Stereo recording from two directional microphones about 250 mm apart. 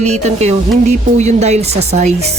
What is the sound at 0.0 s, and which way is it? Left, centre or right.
Speech, right.